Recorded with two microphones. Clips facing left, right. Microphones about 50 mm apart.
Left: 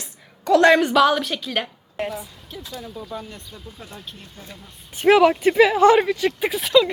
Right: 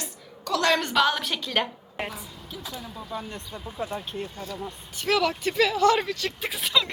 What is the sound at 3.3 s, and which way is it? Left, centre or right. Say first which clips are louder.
Speech: right 2 dB; right.